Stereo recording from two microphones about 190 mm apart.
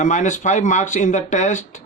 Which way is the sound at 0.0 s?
40° left (ahead or behind).